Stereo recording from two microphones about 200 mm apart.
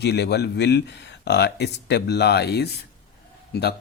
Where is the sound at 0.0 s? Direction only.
55° left (ahead or behind).